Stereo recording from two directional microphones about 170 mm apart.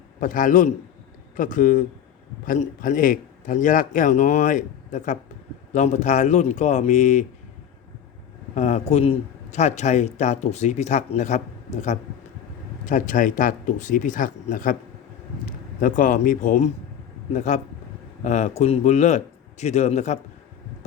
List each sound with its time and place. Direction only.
0.2 s speech: 50° left (ahead or behind)
8.5 s speech: 40° left (ahead or behind)